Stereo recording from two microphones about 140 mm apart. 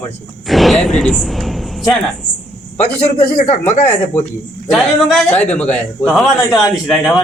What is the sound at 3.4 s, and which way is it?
Speech, 55° left (ahead or behind).